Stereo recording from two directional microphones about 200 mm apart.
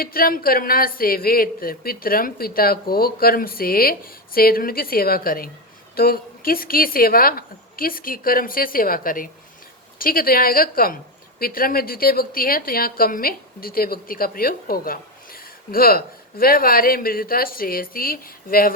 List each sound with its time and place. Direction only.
0.0 s a woman's voice: 45° left (ahead or behind)